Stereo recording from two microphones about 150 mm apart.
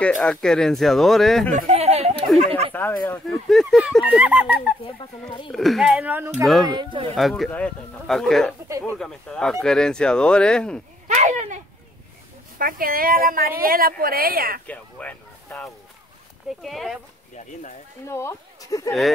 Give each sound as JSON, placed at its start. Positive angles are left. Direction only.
{"t": 0.0, "sound": "speech", "side_deg": 10}
{"t": 1.5, "sound": "a sound", "side_deg": -50}
{"t": 2.7, "sound": "speech", "side_deg": 15}
{"t": 5.5, "sound": "speech", "side_deg": 0}
{"t": 6.6, "sound": "speech", "side_deg": -30}
{"t": 7.2, "sound": "speech", "side_deg": 0}
{"t": 11.1, "sound": "a sound", "side_deg": -50}
{"t": 12.5, "sound": "a woman's voice", "side_deg": -70}
{"t": 14.7, "sound": "speech", "side_deg": 10}
{"t": 18.0, "sound": "speech", "side_deg": 20}